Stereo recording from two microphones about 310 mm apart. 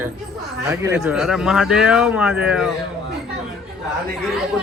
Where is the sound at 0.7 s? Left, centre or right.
Centre.